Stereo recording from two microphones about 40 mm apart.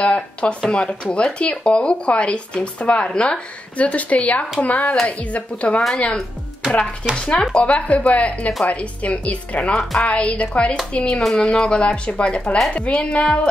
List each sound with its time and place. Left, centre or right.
0.0 s speech: left
7.2 s speech: left